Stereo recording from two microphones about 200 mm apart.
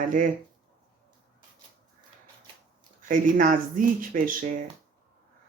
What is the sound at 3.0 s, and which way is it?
Speech, 40° right (ahead or behind).